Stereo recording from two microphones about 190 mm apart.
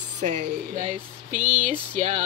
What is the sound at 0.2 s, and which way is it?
Speech, 40° right (ahead or behind).